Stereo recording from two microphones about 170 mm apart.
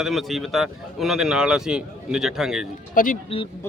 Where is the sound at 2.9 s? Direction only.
55° left (ahead or behind).